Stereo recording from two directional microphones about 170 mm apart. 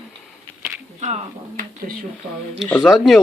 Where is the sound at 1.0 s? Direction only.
50° right (ahead or behind).